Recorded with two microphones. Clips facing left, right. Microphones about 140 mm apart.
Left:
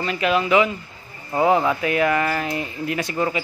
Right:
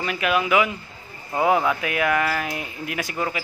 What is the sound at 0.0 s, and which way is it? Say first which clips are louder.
Speech: left 2 dB; 5° right (ahead or behind).